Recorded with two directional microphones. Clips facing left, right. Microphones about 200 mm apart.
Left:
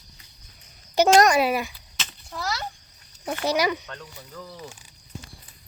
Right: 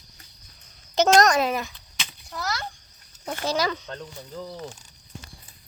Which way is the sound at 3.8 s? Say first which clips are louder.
Right 4 dB; 30° right (ahead or behind).